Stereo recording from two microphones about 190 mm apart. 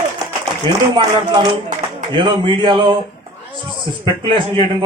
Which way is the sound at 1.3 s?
20° right (ahead or behind).